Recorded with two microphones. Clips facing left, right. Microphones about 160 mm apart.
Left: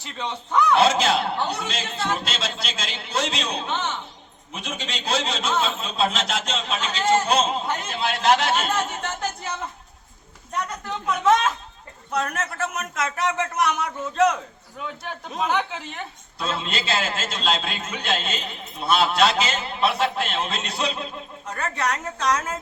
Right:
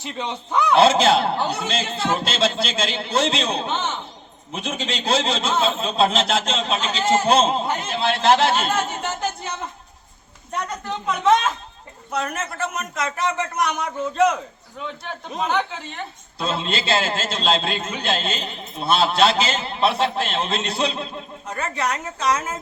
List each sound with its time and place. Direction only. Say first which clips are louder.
0.0 s a man's voice: right 3 dB; 20° right (ahead or behind)
10.8 s a man's voice: right 1 dB; centre (ahead or behind)
16.4 s a man's voice: right 3 dB; 30° right (ahead or behind)
21.4 s a man's voice: right 1 dB; centre (ahead or behind)